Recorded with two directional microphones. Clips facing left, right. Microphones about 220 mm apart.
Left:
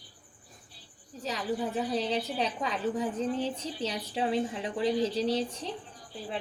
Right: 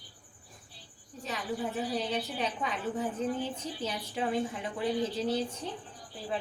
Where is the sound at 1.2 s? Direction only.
35° left (ahead or behind).